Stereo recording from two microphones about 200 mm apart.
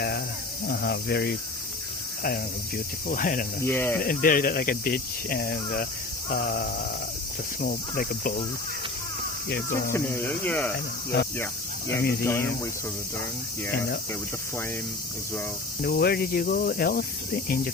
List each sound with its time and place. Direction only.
0.7 s speech: 55° left (ahead or behind)
3.6 s speech: 10° left (ahead or behind)
4.0 s speech: 45° left (ahead or behind)
9.5 s speech: 45° left (ahead or behind)
9.9 s speech: 10° left (ahead or behind)
12.2 s speech: 15° left (ahead or behind)
15.8 s speech: 50° left (ahead or behind)